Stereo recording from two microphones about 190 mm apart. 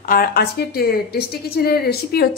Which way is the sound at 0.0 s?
50° left (ahead or behind).